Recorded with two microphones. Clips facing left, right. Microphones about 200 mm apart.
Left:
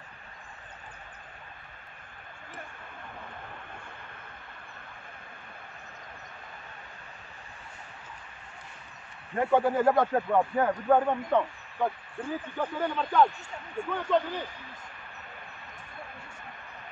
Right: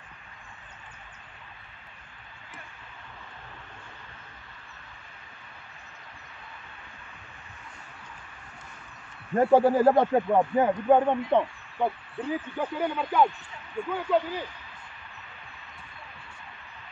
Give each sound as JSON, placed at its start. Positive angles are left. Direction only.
{"t": 9.3, "sound": "speech", "side_deg": -35}
{"t": 10.1, "sound": "speech", "side_deg": -20}